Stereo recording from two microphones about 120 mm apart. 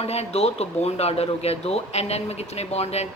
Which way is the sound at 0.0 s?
60° left (ahead or behind).